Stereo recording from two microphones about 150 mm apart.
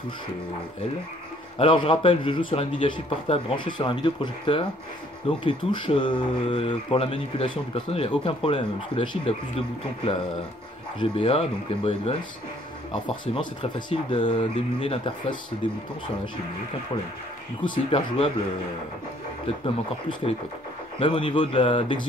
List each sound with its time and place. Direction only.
1.6 s speech: 35° left (ahead or behind)
17.6 s speech: 35° left (ahead or behind)
19.4 s speech: 40° left (ahead or behind)